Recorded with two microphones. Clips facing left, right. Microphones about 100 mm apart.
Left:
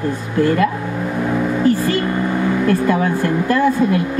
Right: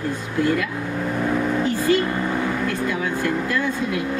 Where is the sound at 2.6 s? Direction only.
45° left (ahead or behind).